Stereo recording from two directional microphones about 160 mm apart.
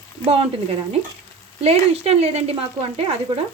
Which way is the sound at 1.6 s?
40° right (ahead or behind).